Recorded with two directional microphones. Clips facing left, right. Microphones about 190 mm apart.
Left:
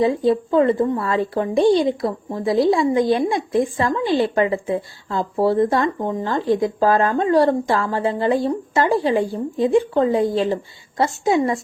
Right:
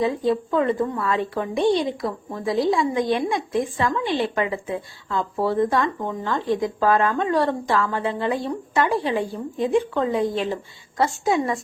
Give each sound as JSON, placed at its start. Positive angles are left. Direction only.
{"t": 0.0, "sound": "a woman's voice", "side_deg": 30}